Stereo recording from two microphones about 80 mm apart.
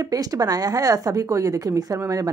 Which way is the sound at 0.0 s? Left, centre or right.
Right.